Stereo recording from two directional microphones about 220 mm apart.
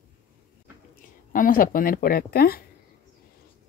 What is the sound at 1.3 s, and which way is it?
Speech, 40° left (ahead or behind).